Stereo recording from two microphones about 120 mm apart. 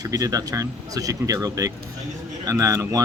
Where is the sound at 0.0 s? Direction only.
30° right (ahead or behind).